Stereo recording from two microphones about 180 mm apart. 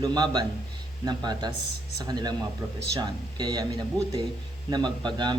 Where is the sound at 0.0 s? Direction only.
25° right (ahead or behind).